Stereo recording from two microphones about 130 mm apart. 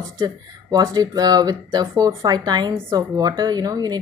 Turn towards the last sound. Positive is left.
turn(degrees=-30)  # may be behind; listen again after turning